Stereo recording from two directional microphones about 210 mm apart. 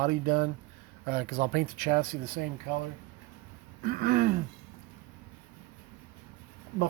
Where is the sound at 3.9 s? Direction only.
45° right (ahead or behind).